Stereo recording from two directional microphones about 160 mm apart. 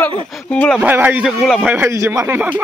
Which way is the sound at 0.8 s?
10° right (ahead or behind).